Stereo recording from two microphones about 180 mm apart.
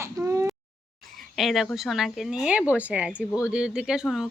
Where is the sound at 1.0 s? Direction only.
Centre (ahead or behind).